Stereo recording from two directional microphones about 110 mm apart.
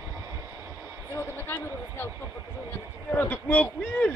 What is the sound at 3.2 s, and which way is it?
Speech, 20° left (ahead or behind).